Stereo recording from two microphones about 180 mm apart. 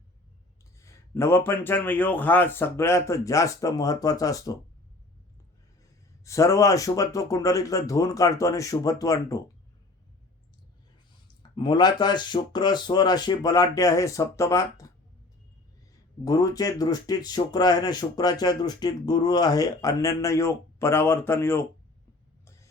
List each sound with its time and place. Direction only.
0.8 s a man's voice: 15° left (ahead or behind)
6.2 s speech: 15° left (ahead or behind)
11.5 s speech: 25° left (ahead or behind)
16.2 s speech: 20° left (ahead or behind)